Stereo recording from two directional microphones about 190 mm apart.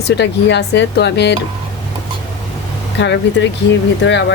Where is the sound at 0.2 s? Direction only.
65° left (ahead or behind).